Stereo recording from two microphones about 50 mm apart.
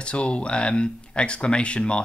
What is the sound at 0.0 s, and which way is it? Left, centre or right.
Speech, left.